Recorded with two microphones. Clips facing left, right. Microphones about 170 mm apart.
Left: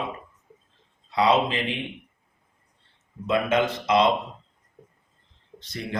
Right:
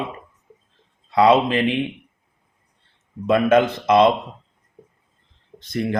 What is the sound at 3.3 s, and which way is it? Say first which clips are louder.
Speech: right 7 dB; 55° right (ahead or behind).